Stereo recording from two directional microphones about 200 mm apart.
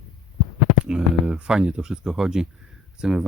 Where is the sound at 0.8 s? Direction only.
5° right (ahead or behind).